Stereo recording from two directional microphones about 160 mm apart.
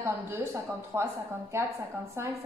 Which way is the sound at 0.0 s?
15° right (ahead or behind).